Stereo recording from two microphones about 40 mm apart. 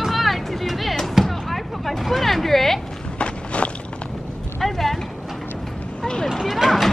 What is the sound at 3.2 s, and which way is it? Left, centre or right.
Walk, left.